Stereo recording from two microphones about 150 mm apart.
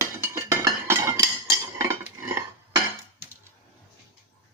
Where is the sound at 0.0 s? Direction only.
20° right (ahead or behind).